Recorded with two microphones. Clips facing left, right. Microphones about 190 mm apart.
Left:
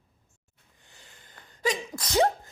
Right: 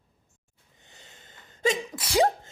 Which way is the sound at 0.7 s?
20° right (ahead or behind).